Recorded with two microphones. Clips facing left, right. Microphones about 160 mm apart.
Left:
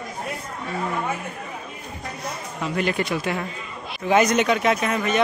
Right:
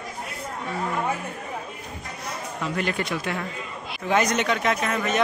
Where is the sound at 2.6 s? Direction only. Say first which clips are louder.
Left 3 dB; 5° left (ahead or behind).